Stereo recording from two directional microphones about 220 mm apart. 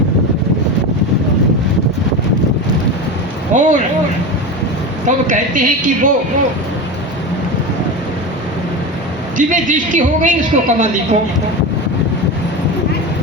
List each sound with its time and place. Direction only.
3.5 s a sound: 35° right (ahead or behind)
5.0 s a woman's voice: 35° right (ahead or behind)
9.4 s a woman's voice: 35° right (ahead or behind)